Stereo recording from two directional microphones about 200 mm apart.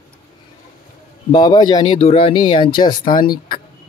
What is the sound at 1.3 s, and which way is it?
Speech, 20° left (ahead or behind).